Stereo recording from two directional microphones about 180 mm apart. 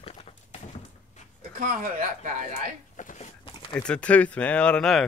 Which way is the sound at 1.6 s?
50° right (ahead or behind).